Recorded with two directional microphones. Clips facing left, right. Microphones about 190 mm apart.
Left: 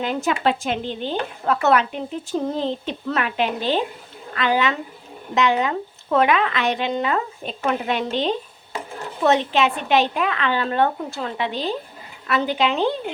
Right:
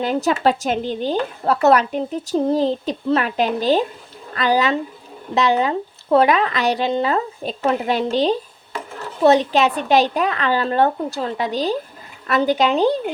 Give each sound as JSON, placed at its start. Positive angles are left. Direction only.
{"t": 0.0, "sound": "speech", "side_deg": -40}